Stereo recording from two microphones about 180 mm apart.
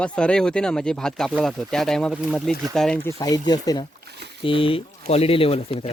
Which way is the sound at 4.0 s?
65° right (ahead or behind).